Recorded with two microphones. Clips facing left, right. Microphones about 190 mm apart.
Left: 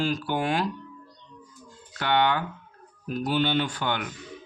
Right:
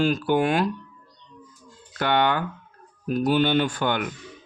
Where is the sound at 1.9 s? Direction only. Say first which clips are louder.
Right 2 dB; 50° right (ahead or behind).